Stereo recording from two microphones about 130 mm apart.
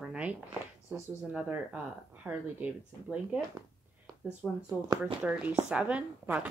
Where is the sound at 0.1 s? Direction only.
10° right (ahead or behind).